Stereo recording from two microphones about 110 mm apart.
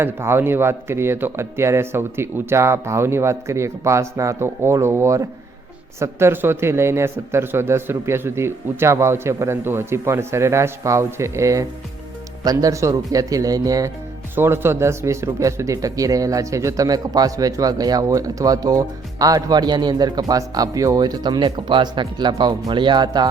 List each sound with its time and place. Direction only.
0.0 s speech: 20° right (ahead or behind)
14.3 s speech: 20° right (ahead or behind); by 23.3 s 40° right (ahead or behind)